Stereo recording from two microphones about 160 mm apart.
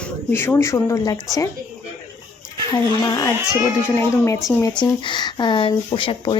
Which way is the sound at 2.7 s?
20° left (ahead or behind).